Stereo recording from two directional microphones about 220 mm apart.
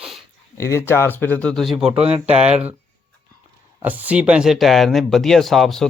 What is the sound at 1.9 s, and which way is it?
Speech, 25° right (ahead or behind).